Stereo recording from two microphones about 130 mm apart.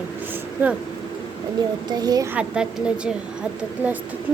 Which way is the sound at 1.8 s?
30° right (ahead or behind).